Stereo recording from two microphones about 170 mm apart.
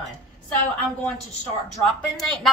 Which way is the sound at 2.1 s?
Centre (ahead or behind).